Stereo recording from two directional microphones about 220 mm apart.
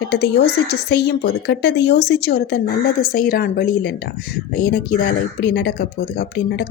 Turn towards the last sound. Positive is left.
turn(degrees=50)  # may be behind; listen again after turning